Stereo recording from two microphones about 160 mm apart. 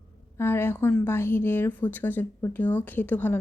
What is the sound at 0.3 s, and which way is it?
A woman's voice, 15° left (ahead or behind).